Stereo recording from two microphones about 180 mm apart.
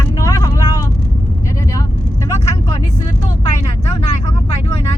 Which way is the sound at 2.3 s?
15° left (ahead or behind).